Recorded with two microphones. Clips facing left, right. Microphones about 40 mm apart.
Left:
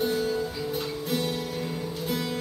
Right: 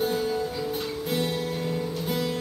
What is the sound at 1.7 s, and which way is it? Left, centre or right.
Music, centre.